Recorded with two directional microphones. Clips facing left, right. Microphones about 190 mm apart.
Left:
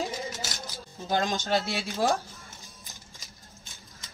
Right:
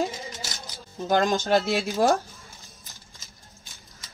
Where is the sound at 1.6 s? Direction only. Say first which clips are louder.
Right 7 dB; centre (ahead or behind).